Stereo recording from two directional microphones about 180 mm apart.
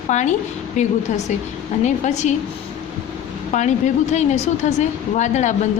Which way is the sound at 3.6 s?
40° left (ahead or behind).